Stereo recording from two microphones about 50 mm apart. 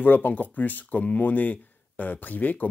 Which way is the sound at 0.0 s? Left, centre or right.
Left.